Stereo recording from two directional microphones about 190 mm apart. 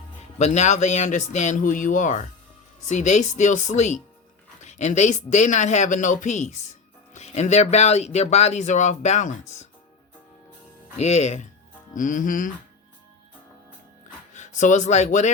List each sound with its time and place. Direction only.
0.3 s speech: 35° left (ahead or behind)
10.9 s speech: 35° left (ahead or behind)
14.3 s speech: 40° left (ahead or behind)